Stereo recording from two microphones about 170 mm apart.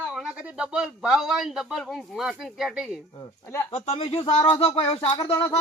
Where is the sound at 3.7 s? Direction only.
40° left (ahead or behind).